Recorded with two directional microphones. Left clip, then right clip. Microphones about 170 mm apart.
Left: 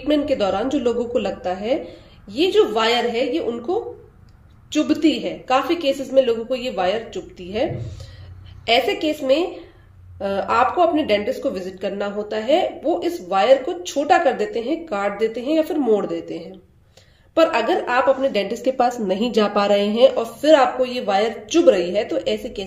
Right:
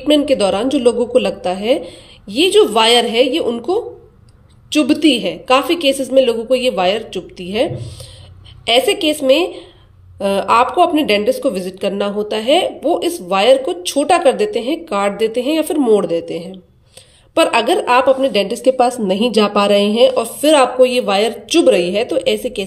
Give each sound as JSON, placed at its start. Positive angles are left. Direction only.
{"t": 0.0, "sound": "a woman's voice", "side_deg": -40}